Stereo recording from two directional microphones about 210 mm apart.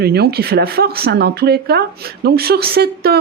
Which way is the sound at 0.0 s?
50° right (ahead or behind).